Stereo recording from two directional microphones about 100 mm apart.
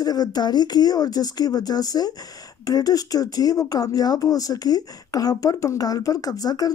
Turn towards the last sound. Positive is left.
turn(degrees=40)  # may be behind; listen again after turning